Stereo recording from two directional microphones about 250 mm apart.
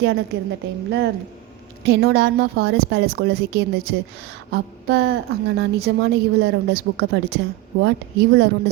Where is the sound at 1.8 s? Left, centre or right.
Right.